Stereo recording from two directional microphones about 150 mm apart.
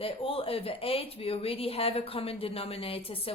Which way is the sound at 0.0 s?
40° left (ahead or behind).